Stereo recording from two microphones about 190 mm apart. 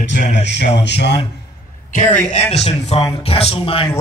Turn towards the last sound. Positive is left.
turn(degrees=30)  # may be behind; listen again after turning